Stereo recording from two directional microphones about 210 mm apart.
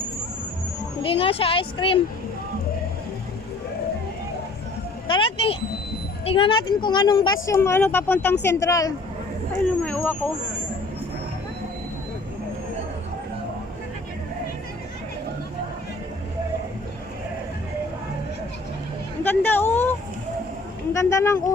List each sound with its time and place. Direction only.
1.0 s speech: 25° left (ahead or behind)
5.0 s speech: 25° left (ahead or behind); by 10.2 s 5° left (ahead or behind)
19.2 s a sound: 10° left (ahead or behind)
20.9 s speech: 15° left (ahead or behind)